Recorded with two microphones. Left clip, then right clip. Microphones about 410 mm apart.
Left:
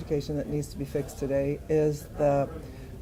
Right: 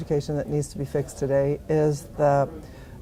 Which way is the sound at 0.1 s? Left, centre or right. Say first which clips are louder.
Right 4 dB; right.